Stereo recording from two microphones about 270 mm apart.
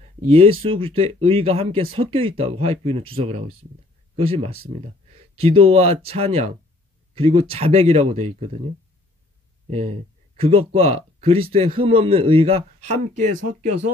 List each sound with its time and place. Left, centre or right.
0.3 s a man's voice: right
9.7 s a man's voice: right